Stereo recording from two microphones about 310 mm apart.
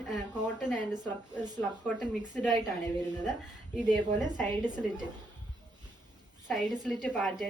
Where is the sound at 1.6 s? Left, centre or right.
Centre.